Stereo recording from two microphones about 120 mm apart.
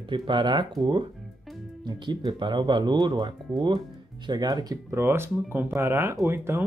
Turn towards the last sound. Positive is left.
turn(degrees=-20)  # may be behind; listen again after turning